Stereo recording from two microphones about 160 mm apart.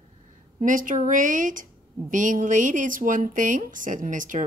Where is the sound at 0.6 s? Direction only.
55° right (ahead or behind).